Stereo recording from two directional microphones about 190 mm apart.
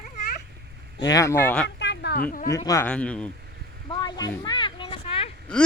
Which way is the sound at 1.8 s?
65° left (ahead or behind).